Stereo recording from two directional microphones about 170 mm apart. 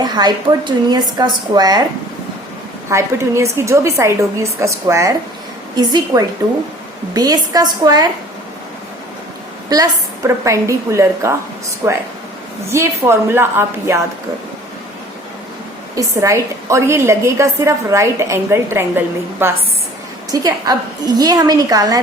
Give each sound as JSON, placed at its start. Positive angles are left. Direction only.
{"t": 0.0, "sound": "a woman's voice", "side_deg": -25}
{"t": 2.9, "sound": "a woman's voice", "side_deg": -15}
{"t": 9.6, "sound": "a woman's voice", "side_deg": -20}
{"t": 16.0, "sound": "a woman's voice", "side_deg": -20}